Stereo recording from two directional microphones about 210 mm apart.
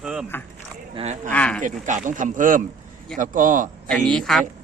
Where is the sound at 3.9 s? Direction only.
Centre (ahead or behind).